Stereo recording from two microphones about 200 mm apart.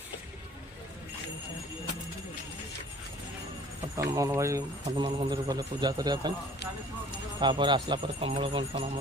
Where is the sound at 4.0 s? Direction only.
15° right (ahead or behind).